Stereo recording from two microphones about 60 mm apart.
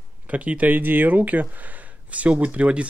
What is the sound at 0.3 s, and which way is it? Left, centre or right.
Speech, right.